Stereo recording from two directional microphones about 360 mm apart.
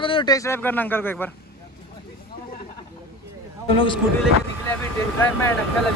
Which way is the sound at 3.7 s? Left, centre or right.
Centre.